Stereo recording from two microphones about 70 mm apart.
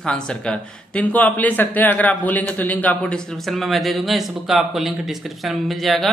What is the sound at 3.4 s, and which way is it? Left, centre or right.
Speech, centre.